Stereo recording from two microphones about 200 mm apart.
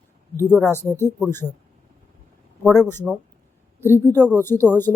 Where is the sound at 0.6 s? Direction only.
10° left (ahead or behind).